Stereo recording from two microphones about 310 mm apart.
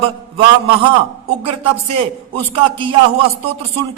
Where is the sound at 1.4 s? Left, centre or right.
Centre.